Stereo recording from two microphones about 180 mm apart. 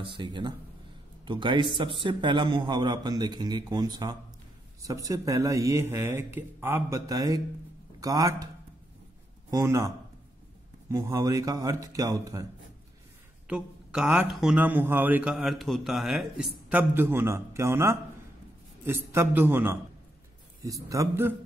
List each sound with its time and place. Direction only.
0.1 s a man's voice: 25° right (ahead or behind)
9.5 s a man's voice: 15° right (ahead or behind)
13.5 s a man's voice: 5° right (ahead or behind)